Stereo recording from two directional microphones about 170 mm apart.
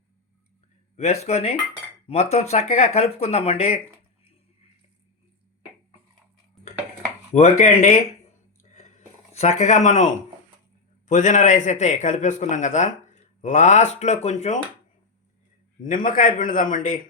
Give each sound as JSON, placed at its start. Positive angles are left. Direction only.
{"t": 0.9, "sound": "speech", "side_deg": 40}
{"t": 7.3, "sound": "a man's voice", "side_deg": 40}
{"t": 8.7, "sound": "a sound", "side_deg": 40}
{"t": 11.1, "sound": "a man's voice", "side_deg": 45}
{"t": 15.8, "sound": "a man's voice", "side_deg": 50}